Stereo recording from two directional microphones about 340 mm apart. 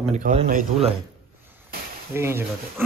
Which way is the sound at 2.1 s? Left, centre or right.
Centre.